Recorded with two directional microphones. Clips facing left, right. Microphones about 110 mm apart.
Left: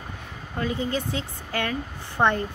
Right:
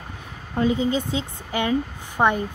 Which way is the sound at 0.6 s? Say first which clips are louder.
Right 6 dB; 20° right (ahead or behind).